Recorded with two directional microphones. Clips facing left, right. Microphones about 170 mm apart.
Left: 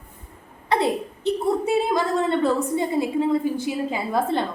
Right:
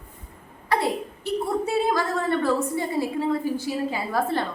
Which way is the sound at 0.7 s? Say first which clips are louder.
Left 2 dB; 20° left (ahead or behind).